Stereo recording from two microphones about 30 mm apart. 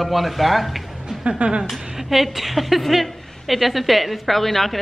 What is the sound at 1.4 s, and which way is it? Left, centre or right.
Speech, right.